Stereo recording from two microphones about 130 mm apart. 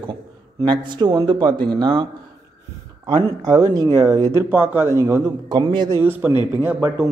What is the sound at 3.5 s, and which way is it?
Speech, 30° right (ahead or behind).